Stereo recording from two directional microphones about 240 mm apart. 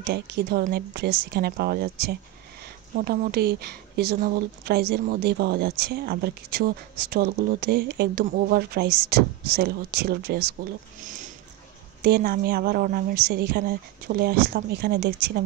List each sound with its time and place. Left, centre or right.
0.0 s speech: right